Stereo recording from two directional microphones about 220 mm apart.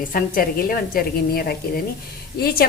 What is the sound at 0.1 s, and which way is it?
A woman's voice, 40° left (ahead or behind).